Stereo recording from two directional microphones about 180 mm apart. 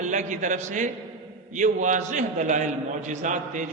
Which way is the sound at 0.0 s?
40° right (ahead or behind).